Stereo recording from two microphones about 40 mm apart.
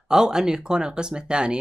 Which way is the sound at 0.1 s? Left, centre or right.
Centre.